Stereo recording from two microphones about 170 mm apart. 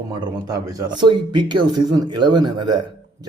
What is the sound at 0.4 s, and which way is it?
A man's voice, 20° right (ahead or behind).